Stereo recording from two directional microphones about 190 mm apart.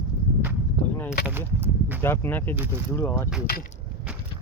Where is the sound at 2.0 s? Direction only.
10° left (ahead or behind).